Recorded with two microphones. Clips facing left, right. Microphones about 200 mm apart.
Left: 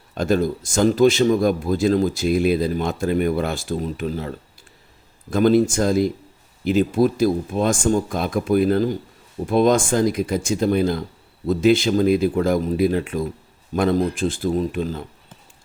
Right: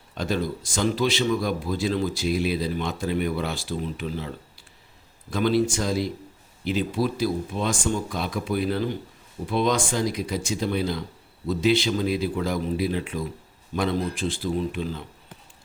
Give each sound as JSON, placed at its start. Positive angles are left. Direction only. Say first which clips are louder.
{"t": 0.1, "sound": "speech", "louder": "left 7 dB", "side_deg": 50}